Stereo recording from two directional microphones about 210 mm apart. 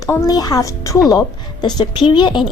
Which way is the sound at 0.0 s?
15° left (ahead or behind).